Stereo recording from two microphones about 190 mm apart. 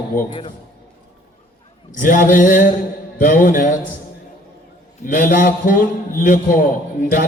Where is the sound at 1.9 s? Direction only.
45° left (ahead or behind).